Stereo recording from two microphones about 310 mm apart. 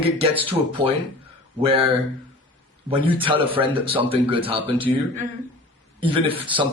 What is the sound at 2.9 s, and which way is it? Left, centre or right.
Speech, centre.